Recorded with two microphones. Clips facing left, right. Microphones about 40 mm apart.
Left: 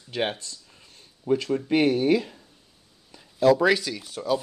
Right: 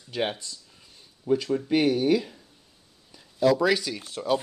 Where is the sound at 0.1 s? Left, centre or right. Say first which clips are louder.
Left 1 dB; left.